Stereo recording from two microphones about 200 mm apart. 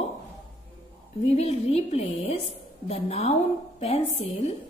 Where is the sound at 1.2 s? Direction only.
35° left (ahead or behind).